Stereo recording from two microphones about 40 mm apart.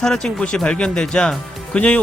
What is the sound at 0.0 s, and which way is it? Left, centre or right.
Speech, centre.